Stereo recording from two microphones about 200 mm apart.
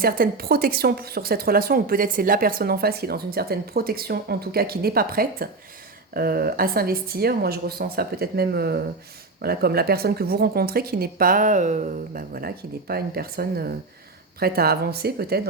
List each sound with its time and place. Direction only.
0.0 s a woman's voice: 50° right (ahead or behind)